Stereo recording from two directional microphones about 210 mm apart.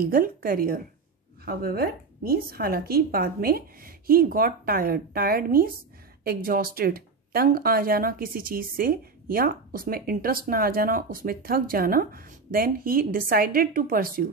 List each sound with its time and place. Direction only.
0.0 s speech: 45° right (ahead or behind)